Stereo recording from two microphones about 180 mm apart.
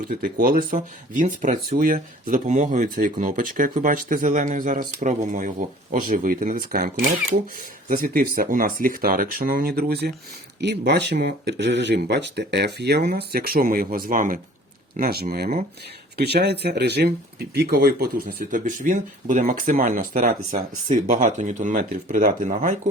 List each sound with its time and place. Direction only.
0.1 s speech: 50° right (ahead or behind)